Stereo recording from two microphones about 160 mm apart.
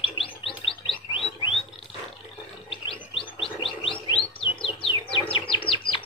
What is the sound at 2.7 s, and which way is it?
Chirp, 35° left (ahead or behind).